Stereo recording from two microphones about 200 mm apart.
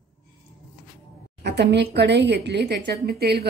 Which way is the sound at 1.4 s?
60° right (ahead or behind).